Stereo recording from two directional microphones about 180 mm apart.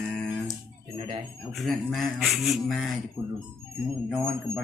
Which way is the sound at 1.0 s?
35° right (ahead or behind).